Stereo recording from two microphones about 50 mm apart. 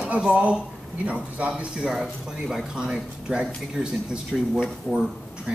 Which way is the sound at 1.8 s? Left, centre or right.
Centre.